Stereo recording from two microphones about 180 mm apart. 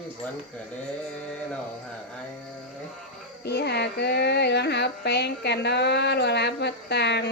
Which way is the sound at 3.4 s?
65° left (ahead or behind).